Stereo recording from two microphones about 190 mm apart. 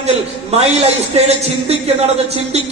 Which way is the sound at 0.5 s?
35° right (ahead or behind).